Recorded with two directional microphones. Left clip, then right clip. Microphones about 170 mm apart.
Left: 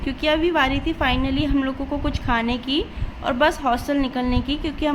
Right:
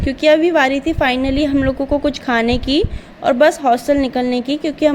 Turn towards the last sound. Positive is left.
turn(degrees=-35)  # may be behind; listen again after turning